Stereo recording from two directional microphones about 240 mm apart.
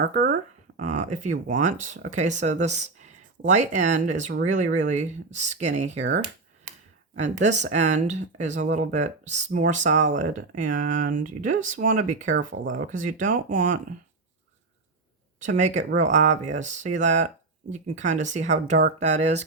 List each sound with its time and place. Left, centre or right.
0.1 s speech: right
7.2 s speech: right
15.4 s speech: right